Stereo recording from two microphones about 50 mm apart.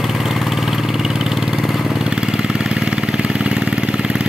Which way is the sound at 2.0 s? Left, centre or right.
Centre.